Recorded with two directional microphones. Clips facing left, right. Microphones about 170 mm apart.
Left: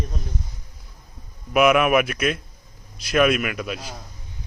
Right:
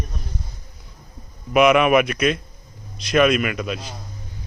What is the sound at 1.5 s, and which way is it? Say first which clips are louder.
A man's voice: right 2 dB; 5° left (ahead or behind).